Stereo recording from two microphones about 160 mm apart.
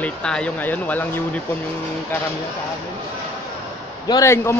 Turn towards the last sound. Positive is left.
turn(degrees=20)  # may be behind; listen again after turning